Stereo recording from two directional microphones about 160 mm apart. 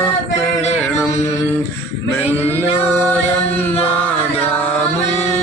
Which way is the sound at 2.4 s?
15° right (ahead or behind).